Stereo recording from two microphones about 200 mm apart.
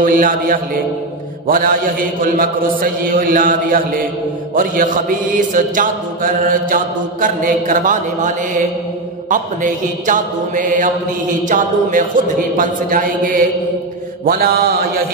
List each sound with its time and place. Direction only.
0.0 s speech: 45° right (ahead or behind)
4.6 s mantra: 45° right (ahead or behind)
9.3 s mantra: 40° right (ahead or behind)
12.5 s speech: 45° right (ahead or behind)